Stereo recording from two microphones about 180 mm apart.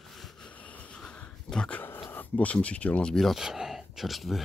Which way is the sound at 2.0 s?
10° left (ahead or behind).